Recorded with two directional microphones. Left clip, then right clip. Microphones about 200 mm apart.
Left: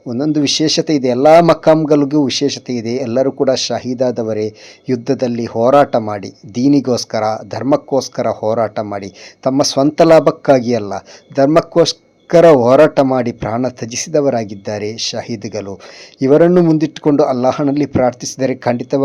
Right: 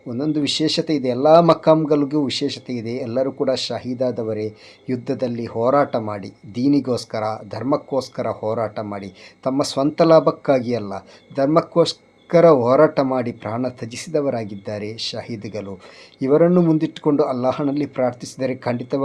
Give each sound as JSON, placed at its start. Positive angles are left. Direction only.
{"t": 0.1, "sound": "speech", "side_deg": 30}